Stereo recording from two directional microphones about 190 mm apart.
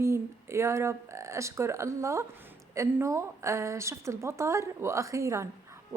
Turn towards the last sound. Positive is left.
turn(degrees=-15)  # may be behind; listen again after turning